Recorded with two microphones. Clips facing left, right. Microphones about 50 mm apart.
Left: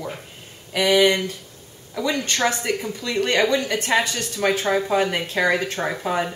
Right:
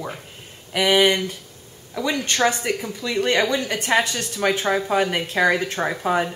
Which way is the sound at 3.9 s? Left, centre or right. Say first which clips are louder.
Right 2 dB; centre.